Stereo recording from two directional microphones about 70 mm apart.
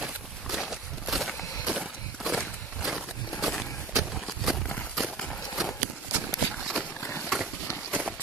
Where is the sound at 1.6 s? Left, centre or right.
Centre.